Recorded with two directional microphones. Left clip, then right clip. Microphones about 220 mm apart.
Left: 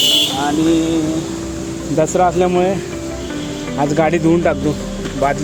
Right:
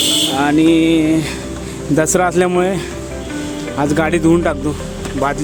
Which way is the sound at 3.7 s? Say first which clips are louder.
Left 1 dB; 10° right (ahead or behind).